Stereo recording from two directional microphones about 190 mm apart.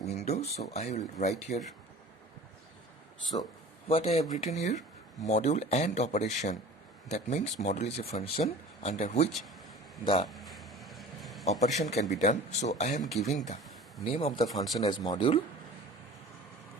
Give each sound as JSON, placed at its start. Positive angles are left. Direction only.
{"t": 0.0, "sound": "speech", "side_deg": 35}
{"t": 3.8, "sound": "speech", "side_deg": 30}
{"t": 10.2, "sound": "a sound", "side_deg": 0}
{"t": 11.6, "sound": "speech", "side_deg": 35}
{"t": 13.1, "sound": "speech", "side_deg": 0}
{"t": 14.1, "sound": "speech", "side_deg": 30}